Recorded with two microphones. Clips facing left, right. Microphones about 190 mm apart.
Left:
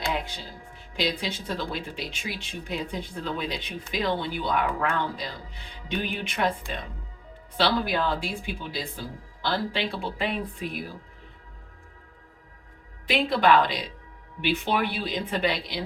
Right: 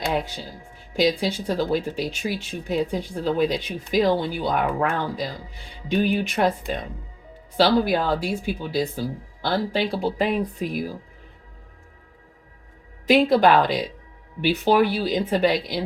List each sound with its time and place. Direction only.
0.9 s speech: 45° right (ahead or behind)
7.5 s speech: 40° right (ahead or behind)
13.1 s speech: 45° right (ahead or behind)